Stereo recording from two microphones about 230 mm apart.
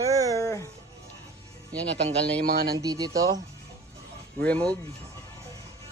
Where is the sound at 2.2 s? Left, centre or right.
Right.